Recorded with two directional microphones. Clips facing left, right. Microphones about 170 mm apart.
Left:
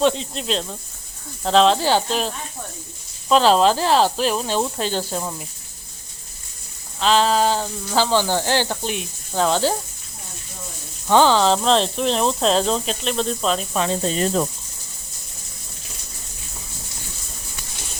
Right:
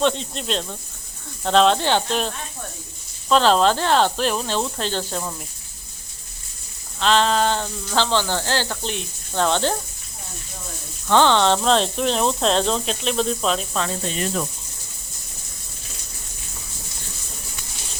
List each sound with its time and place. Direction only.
0.0 s speech: centre (ahead or behind)
7.0 s speech: 5° left (ahead or behind)
11.1 s speech: 5° left (ahead or behind)
14.0 s speech: 35° left (ahead or behind)